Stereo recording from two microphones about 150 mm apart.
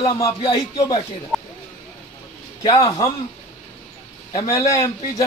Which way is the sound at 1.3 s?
Centre (ahead or behind).